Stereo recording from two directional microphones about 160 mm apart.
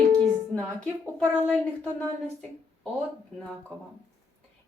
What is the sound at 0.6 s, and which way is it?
A woman's voice, 5° left (ahead or behind).